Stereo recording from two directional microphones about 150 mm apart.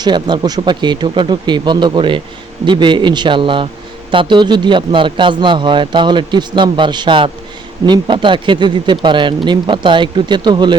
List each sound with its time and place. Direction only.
0.0 s a man's voice: 30° right (ahead or behind)